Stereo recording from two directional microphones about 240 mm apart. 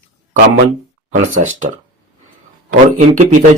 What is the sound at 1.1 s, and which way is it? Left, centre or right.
Speech, right.